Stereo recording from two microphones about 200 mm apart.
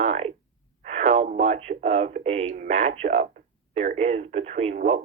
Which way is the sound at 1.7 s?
35° right (ahead or behind).